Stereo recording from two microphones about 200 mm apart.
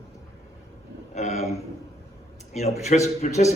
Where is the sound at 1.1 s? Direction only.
35° left (ahead or behind).